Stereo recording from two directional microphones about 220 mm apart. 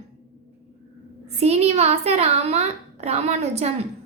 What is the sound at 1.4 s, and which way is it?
A woman's voice, 30° right (ahead or behind).